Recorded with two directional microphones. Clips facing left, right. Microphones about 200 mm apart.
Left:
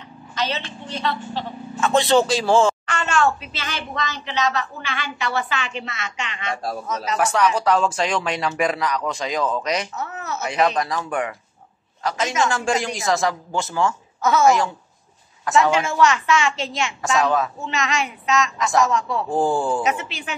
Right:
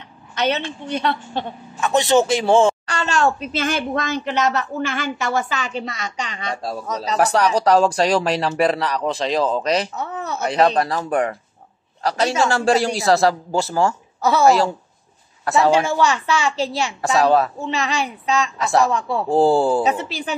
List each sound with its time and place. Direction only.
0.3 s a woman's voice: 60° right (ahead or behind)
1.8 s a man's voice: 15° right (ahead or behind)
2.9 s a woman's voice: 35° right (ahead or behind)
6.6 s a woman's voice: 25° right (ahead or behind)